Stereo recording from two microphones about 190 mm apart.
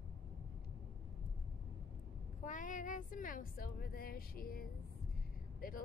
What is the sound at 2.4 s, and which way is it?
Speech, 45° left (ahead or behind).